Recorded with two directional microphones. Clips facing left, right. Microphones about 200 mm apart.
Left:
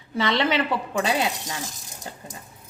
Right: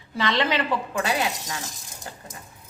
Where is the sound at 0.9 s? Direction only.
25° left (ahead or behind).